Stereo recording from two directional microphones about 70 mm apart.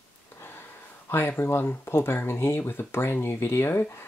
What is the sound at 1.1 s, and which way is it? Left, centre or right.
Speech, left.